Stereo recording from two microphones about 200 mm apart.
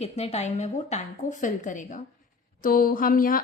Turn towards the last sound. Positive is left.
turn(degrees=45)  # may be behind; listen again after turning